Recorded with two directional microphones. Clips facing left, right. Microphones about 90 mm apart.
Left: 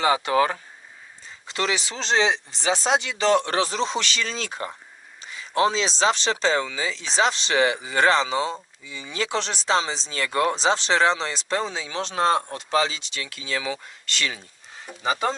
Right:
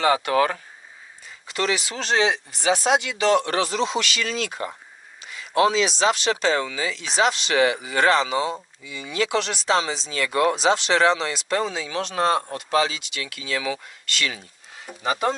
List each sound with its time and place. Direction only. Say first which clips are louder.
0.0 s speech: right 1 dB; 20° left (ahead or behind)
14.8 s speech: right 1 dB; 5° right (ahead or behind)